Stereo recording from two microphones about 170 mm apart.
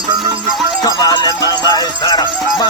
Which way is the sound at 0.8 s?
25° left (ahead or behind).